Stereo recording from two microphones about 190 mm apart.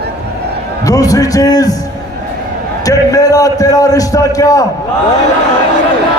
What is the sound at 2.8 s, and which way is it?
A man's voice, 20° left (ahead or behind).